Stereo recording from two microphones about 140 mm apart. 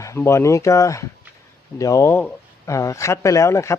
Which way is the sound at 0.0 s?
20° left (ahead or behind).